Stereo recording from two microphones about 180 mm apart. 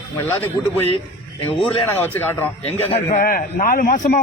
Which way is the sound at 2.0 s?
10° left (ahead or behind).